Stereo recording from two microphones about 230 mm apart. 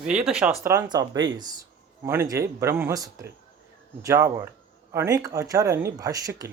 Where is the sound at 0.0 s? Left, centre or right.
Centre.